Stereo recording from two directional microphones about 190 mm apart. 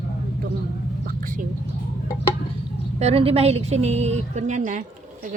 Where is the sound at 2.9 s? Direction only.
30° right (ahead or behind).